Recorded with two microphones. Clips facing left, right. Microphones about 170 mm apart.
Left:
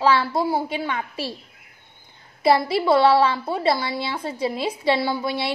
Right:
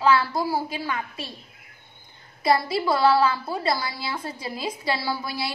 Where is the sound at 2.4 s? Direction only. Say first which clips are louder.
Left 4 dB; 25° left (ahead or behind).